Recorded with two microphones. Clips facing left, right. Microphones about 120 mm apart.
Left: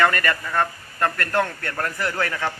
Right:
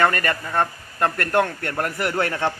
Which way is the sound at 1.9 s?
30° right (ahead or behind).